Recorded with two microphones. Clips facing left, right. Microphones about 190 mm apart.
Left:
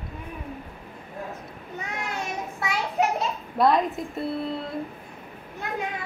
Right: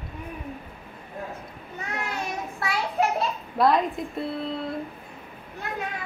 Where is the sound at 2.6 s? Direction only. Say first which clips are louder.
Even; 20° left (ahead or behind).